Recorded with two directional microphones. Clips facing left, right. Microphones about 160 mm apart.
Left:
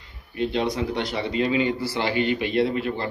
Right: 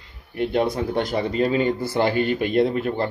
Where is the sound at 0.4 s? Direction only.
55° right (ahead or behind).